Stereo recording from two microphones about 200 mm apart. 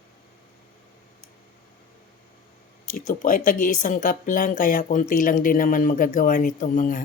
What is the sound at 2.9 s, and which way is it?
Speech, 40° left (ahead or behind).